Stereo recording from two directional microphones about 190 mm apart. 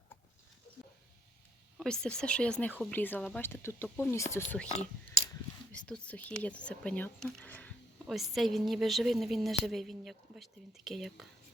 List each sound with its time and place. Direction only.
1.8 s speech: 5° left (ahead or behind)
4.7 s a sound: 35° left (ahead or behind)
5.7 s speech: 5° left (ahead or behind)